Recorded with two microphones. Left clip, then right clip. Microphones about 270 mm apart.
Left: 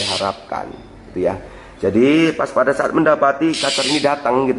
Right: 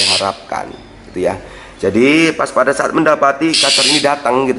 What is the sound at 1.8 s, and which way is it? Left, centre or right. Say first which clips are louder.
A man's voice: right 3 dB; centre.